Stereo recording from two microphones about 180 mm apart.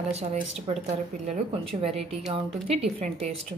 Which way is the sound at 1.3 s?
35° right (ahead or behind).